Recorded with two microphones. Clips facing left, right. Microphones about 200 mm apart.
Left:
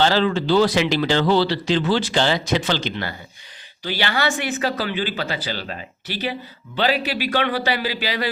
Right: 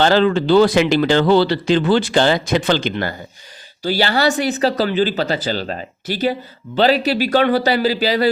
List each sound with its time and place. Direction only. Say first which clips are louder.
0.0 s speech: right 4 dB; 55° right (ahead or behind)
3.8 s speech: right 6 dB; 40° right (ahead or behind)